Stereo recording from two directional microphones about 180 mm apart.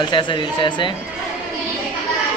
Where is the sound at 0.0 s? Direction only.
25° left (ahead or behind).